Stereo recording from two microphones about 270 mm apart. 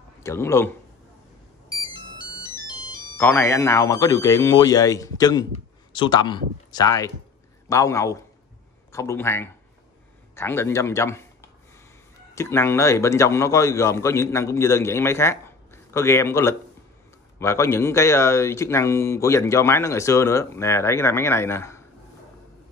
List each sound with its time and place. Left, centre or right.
0.2 s speech: centre
1.7 s ringtone: centre
2.9 s speech: centre